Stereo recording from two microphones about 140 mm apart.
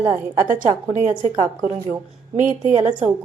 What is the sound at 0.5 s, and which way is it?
A woman's voice, 65° right (ahead or behind).